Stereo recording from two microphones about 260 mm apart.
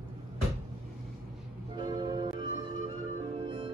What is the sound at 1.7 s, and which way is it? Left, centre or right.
Music, centre.